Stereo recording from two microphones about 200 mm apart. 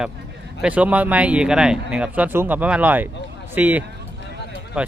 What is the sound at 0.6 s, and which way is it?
Speech, 5° right (ahead or behind).